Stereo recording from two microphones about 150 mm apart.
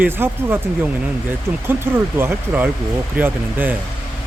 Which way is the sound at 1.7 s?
15° right (ahead or behind).